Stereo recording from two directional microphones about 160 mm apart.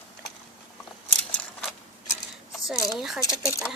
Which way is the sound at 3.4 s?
20° left (ahead or behind).